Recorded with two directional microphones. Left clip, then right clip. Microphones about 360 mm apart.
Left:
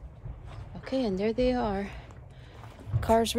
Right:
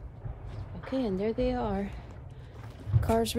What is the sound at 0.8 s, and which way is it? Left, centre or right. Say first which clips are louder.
A woman's voice: left 2 dB; left.